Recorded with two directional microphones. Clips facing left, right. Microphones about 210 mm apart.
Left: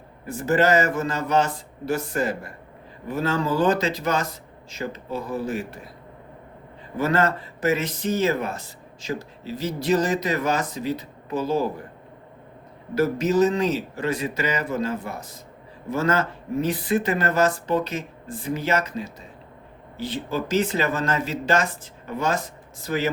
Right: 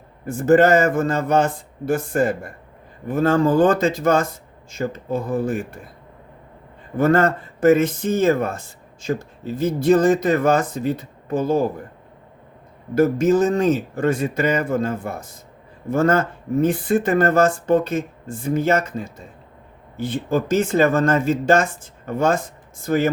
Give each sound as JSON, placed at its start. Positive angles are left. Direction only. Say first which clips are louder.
{"t": 0.3, "sound": "speech", "louder": "right 6 dB", "side_deg": -50}
{"t": 6.9, "sound": "speech", "louder": "right 5 dB", "side_deg": -50}
{"t": 12.9, "sound": "speech", "louder": "right 5 dB", "side_deg": -50}